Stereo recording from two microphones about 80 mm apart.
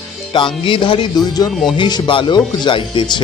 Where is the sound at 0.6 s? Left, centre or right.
Left.